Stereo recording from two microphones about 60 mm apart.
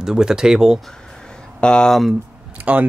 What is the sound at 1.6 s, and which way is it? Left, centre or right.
Speech, centre.